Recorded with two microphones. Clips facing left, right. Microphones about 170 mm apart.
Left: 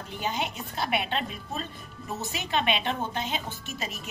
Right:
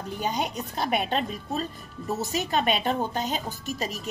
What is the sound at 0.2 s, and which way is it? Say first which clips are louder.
Speech: right 2 dB; 40° right (ahead or behind).